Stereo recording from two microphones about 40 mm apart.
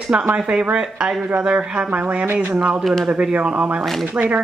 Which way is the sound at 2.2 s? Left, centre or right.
Right.